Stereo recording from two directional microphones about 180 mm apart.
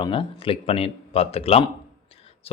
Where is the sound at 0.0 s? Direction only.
30° left (ahead or behind).